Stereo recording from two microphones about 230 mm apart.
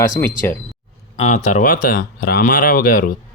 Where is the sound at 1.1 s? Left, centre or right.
Left.